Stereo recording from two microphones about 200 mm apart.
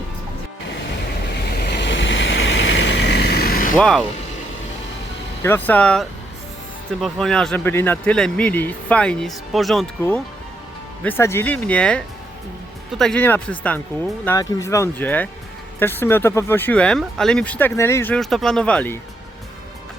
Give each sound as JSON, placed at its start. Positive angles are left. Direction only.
{"t": 1.5, "sound": "vehicle", "side_deg": 55}
{"t": 3.8, "sound": "speech", "side_deg": 5}
{"t": 5.4, "sound": "speech", "side_deg": 10}
{"t": 11.0, "sound": "speech", "side_deg": 10}